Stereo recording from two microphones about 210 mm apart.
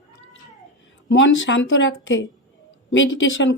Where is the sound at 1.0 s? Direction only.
65° left (ahead or behind).